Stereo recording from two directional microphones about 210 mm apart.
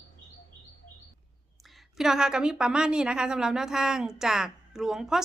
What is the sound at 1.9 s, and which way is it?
A woman's voice, centre (ahead or behind).